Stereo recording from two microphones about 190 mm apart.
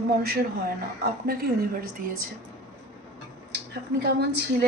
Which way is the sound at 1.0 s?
55° right (ahead or behind).